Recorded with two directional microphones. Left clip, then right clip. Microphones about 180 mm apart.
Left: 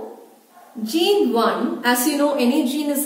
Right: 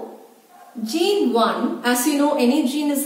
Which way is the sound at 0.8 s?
10° right (ahead or behind).